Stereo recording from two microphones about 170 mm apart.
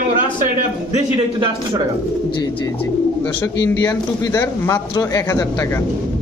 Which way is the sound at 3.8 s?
20° left (ahead or behind).